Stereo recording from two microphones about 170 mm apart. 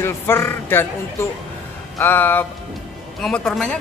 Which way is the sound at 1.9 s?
10° left (ahead or behind).